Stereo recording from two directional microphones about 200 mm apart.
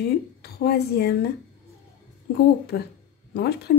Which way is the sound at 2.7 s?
45° left (ahead or behind).